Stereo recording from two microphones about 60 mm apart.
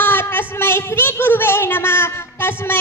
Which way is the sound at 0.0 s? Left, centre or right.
Left.